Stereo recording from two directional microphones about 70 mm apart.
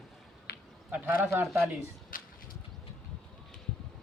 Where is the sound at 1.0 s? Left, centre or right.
Right.